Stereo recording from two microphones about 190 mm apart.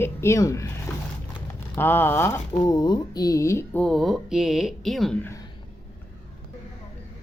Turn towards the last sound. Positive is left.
turn(degrees=0)  # may be behind; listen again after turning